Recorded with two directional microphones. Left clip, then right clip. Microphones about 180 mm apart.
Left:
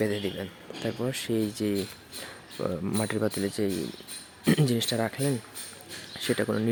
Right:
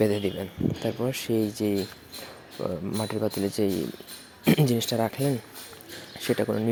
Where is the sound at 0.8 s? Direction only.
5° right (ahead or behind).